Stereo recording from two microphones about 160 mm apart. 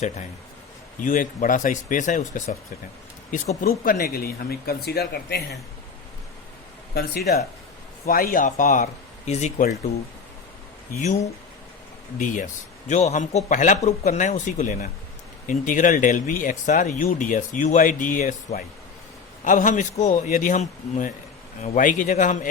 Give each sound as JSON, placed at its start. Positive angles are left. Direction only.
{"t": 1.0, "sound": "speech", "side_deg": 55}
{"t": 3.7, "sound": "speech", "side_deg": 70}
{"t": 4.9, "sound": "speech", "side_deg": 85}
{"t": 6.9, "sound": "speech", "side_deg": 75}
{"t": 12.2, "sound": "speech", "side_deg": 55}